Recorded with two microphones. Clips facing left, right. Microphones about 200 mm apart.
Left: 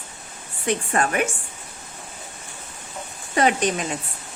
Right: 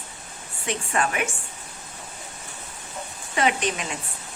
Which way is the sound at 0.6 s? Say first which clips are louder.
Left 3 dB; 40° left (ahead or behind).